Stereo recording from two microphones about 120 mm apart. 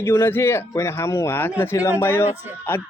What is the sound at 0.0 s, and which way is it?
Speech, 20° left (ahead or behind).